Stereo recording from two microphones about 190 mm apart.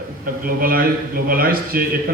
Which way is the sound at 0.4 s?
50° right (ahead or behind).